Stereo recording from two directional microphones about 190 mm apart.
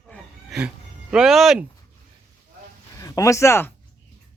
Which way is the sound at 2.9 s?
20° left (ahead or behind).